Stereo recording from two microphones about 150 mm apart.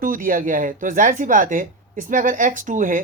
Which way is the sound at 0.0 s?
65° right (ahead or behind).